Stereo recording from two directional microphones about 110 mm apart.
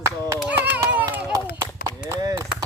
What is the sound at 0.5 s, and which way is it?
Speech, 15° right (ahead or behind).